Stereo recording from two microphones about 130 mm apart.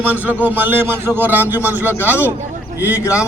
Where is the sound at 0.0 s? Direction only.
15° right (ahead or behind).